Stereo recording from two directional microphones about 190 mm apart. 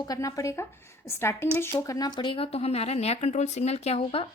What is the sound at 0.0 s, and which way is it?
A woman's voice, 20° left (ahead or behind).